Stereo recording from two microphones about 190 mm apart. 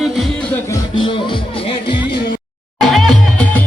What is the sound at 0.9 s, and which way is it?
Speech, 25° left (ahead or behind).